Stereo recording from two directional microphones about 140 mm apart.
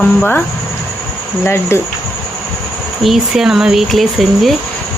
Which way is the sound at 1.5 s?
20° left (ahead or behind).